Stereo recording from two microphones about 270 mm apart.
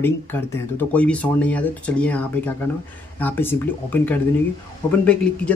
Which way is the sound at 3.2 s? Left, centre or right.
Centre.